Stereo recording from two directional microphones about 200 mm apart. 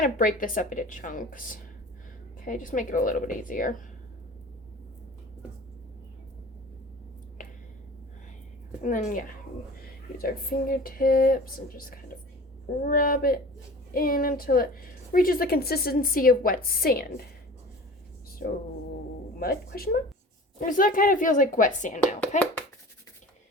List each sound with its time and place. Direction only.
0.0 s a woman's voice: 40° left (ahead or behind)
8.8 s a woman's voice: 40° left (ahead or behind)
18.4 s a woman's voice: 45° left (ahead or behind)